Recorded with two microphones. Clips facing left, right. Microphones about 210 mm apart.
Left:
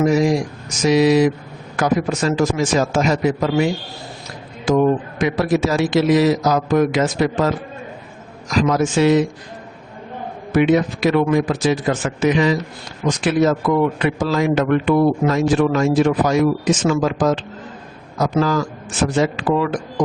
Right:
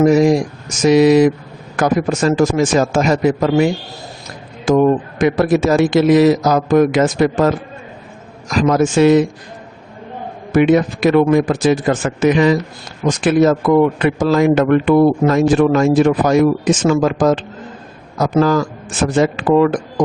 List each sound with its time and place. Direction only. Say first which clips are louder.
0.0 s a man's voice: right 5 dB; 50° right (ahead or behind)
4.7 s a man's voice: right 3 dB; 50° right (ahead or behind)
10.5 s a man's voice: right 3 dB; 50° right (ahead or behind)